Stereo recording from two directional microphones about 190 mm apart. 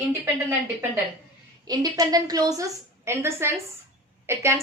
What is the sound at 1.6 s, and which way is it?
A woman's voice, 20° right (ahead or behind).